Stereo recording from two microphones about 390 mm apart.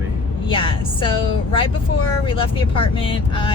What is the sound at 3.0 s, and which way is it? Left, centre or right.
Speech, centre.